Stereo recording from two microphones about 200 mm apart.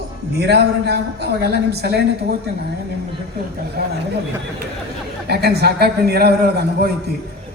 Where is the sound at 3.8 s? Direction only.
55° right (ahead or behind).